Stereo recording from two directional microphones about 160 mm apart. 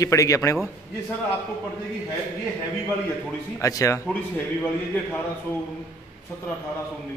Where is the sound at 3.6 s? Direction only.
20° left (ahead or behind).